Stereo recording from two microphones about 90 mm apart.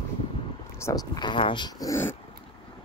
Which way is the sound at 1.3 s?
65° left (ahead or behind).